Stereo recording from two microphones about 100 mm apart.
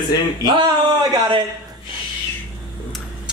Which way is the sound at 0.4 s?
45° right (ahead or behind).